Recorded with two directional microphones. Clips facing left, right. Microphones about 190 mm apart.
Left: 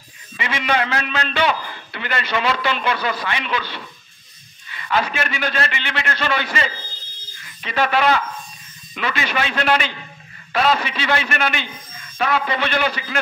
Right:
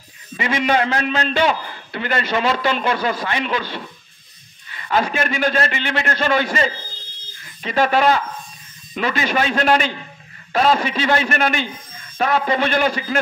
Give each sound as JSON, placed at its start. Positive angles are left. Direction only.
{"t": 0.4, "sound": "a man's voice", "side_deg": -40}